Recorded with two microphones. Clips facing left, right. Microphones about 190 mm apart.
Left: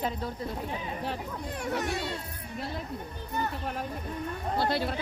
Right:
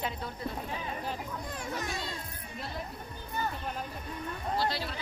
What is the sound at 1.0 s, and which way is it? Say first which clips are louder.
Speech: left 3 dB; 65° left (ahead or behind).